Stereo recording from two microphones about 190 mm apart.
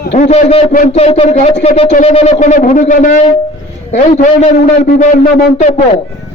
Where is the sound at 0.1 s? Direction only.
35° left (ahead or behind).